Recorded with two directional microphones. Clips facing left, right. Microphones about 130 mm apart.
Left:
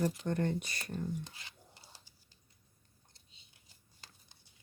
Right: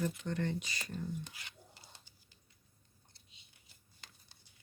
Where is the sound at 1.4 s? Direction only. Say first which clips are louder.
Right 1 dB; 30° left (ahead or behind).